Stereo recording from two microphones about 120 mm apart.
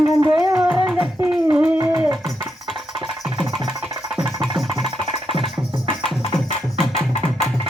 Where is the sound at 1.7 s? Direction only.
25° right (ahead or behind).